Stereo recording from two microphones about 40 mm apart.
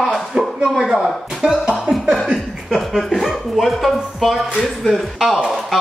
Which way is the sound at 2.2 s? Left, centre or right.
Right.